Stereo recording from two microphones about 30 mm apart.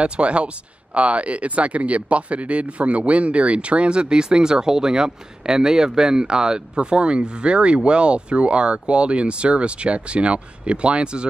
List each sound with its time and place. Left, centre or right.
0.0 s speech: right